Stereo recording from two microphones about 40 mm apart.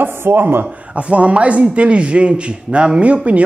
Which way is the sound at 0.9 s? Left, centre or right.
Right.